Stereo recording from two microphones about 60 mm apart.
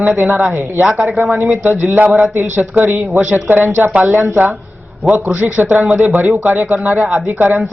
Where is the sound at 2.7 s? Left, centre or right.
Right.